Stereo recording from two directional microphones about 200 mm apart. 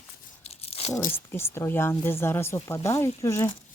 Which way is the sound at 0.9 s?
10° left (ahead or behind).